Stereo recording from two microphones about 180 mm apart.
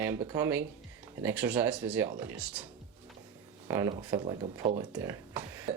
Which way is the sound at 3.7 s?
15° right (ahead or behind).